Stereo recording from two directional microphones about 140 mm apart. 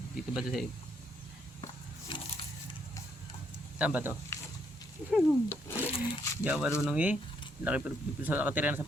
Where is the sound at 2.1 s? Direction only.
35° left (ahead or behind).